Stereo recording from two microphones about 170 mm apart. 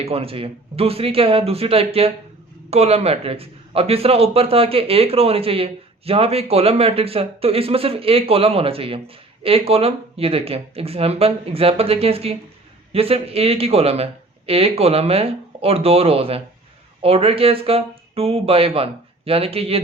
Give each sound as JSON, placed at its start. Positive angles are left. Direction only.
{"t": 0.0, "sound": "speech", "side_deg": -35}